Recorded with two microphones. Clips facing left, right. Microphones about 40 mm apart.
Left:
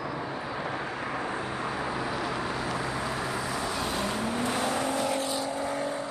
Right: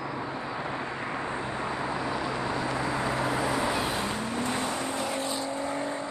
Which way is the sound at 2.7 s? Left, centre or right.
Centre.